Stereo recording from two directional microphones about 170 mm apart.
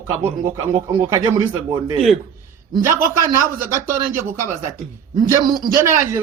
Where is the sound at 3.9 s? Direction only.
55° right (ahead or behind).